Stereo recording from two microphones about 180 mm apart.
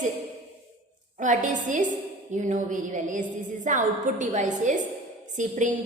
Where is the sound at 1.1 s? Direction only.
45° right (ahead or behind).